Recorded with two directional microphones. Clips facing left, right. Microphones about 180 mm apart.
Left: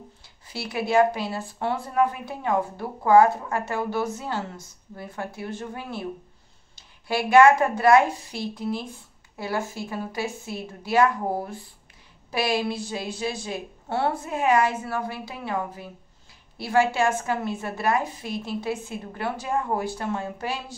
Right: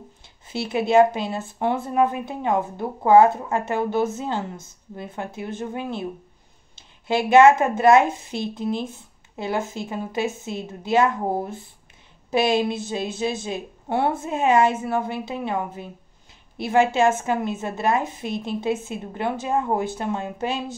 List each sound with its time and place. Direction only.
0.5 s speech: 25° right (ahead or behind)